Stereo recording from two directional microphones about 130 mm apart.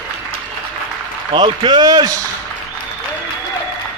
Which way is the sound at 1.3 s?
40° right (ahead or behind).